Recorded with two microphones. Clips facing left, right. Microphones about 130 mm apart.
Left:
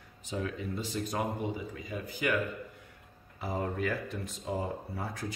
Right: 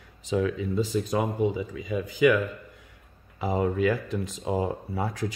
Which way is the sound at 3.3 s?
90° right.